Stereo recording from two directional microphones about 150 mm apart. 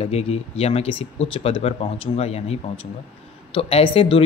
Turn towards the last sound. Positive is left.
turn(degrees=35)  # may be behind; listen again after turning